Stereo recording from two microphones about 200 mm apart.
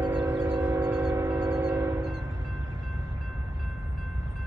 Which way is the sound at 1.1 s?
15° right (ahead or behind).